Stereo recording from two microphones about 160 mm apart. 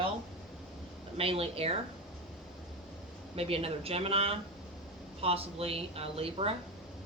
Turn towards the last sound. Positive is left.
turn(degrees=-35)  # may be behind; listen again after turning